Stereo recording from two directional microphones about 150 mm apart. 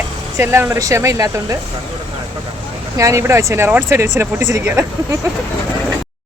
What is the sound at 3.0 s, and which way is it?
Speech, 20° right (ahead or behind).